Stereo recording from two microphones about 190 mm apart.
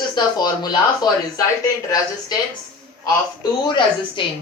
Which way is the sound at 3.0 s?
20° left (ahead or behind).